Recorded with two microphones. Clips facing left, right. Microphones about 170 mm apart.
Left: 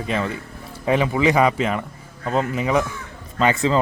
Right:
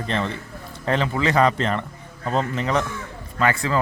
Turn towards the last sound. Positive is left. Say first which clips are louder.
# left 3 dB
turn(degrees=20)  # may be behind; listen again after turning